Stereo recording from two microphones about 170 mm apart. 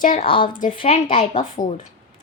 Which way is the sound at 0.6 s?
45° left (ahead or behind).